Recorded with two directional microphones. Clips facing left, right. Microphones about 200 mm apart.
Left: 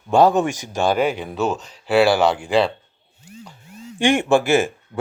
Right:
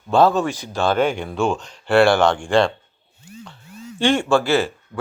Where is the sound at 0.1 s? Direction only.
15° left (ahead or behind).